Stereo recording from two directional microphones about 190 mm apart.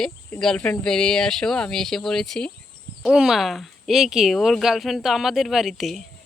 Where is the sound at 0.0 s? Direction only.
5° left (ahead or behind).